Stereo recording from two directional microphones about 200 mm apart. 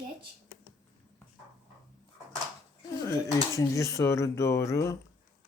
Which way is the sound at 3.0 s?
15° left (ahead or behind).